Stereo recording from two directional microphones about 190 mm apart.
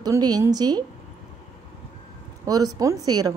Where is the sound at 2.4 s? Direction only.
20° right (ahead or behind).